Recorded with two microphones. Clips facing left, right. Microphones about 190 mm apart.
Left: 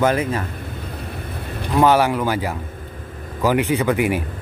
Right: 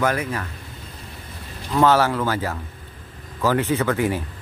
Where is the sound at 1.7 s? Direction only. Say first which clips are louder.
Left 2 dB; 15° left (ahead or behind).